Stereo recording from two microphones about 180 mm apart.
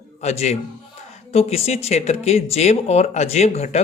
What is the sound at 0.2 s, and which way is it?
Speech, 40° left (ahead or behind).